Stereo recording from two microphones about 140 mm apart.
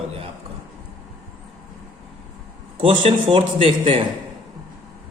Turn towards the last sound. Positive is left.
turn(degrees=-40)  # may be behind; listen again after turning